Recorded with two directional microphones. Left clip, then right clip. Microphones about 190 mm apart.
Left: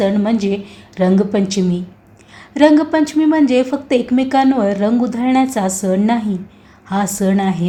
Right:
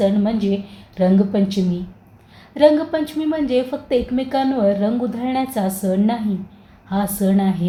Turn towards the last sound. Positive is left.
turn(degrees=30)  # may be behind; listen again after turning